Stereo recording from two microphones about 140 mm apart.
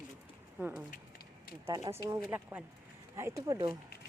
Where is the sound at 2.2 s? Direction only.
10° right (ahead or behind); by 3.7 s 25° right (ahead or behind).